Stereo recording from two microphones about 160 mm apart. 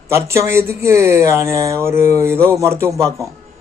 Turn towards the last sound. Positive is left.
turn(degrees=-20)  # may be behind; listen again after turning